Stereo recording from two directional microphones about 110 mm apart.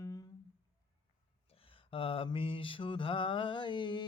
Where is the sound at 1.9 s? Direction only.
55° left (ahead or behind).